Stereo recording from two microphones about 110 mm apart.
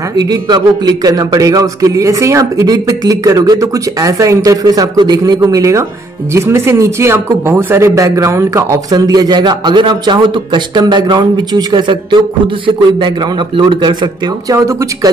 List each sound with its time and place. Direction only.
0.2 s a man's voice: 40° right (ahead or behind)
13.6 s a man's voice: 45° right (ahead or behind)